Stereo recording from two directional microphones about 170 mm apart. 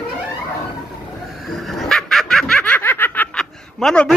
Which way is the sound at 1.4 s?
Centre (ahead or behind).